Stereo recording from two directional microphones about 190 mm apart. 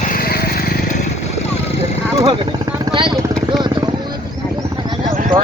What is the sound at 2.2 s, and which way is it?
Speech, 25° right (ahead or behind).